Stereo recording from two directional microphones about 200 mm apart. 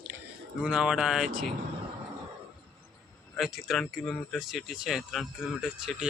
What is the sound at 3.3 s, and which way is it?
Speech, centre (ahead or behind).